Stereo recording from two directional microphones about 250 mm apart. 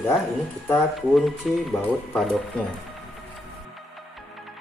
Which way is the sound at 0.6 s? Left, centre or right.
Centre.